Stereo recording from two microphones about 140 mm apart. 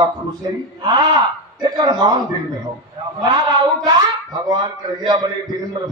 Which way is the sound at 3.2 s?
30° right (ahead or behind).